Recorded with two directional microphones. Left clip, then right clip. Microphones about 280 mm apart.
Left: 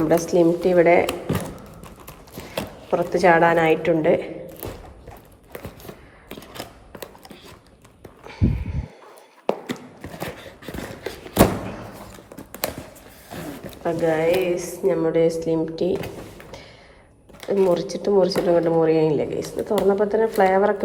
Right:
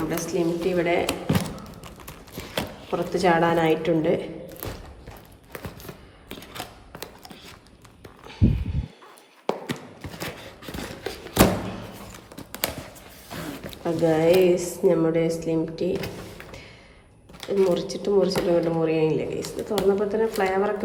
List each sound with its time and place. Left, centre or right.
0.0 s speech: centre
2.0 s clip-clop: centre
5.5 s a sound: centre
14.0 s speech: centre